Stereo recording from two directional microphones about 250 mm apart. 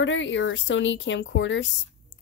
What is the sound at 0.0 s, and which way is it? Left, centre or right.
Speech, left.